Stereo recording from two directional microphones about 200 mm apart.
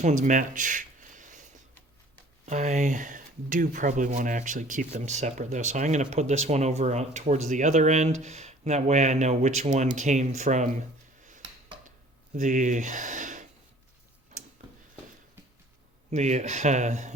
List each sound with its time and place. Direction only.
0.0 s a sound: 40° right (ahead or behind)
2.5 s speech: 35° right (ahead or behind)
12.3 s speech: 40° right (ahead or behind)
16.0 s speech: 35° right (ahead or behind)